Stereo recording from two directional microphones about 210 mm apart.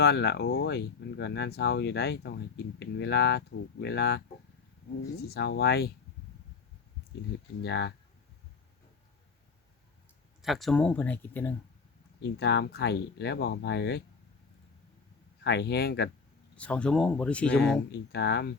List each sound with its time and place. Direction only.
0.0 s speech: 50° left (ahead or behind)
7.6 s speech: 55° left (ahead or behind)
10.4 s speech: centre (ahead or behind)
12.2 s speech: 55° left (ahead or behind)
15.4 s speech: 55° left (ahead or behind)
16.6 s speech: 5° left (ahead or behind)
18.1 s speech: 55° left (ahead or behind)